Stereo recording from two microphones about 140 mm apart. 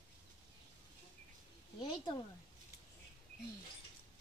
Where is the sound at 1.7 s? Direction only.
35° left (ahead or behind).